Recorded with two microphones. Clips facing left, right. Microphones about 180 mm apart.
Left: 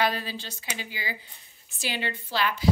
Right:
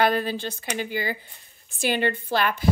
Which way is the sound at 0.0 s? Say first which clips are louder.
Right 6 dB; 55° right (ahead or behind).